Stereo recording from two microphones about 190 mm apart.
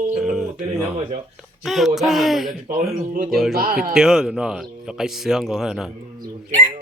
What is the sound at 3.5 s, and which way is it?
Speech, 50° right (ahead or behind).